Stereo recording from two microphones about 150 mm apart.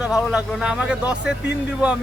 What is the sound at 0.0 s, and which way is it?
Speech, 10° right (ahead or behind).